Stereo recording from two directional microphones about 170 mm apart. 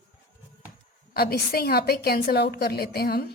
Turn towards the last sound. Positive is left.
turn(degrees=65)  # may be behind; listen again after turning